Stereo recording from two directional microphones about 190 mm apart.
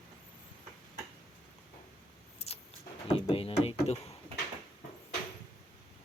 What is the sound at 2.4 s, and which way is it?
Vehicle, 35° left (ahead or behind).